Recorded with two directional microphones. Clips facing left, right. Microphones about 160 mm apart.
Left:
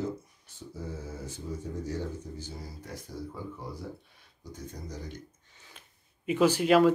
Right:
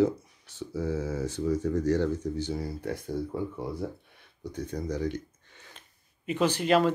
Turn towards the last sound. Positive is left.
turn(degrees=5)  # may be behind; listen again after turning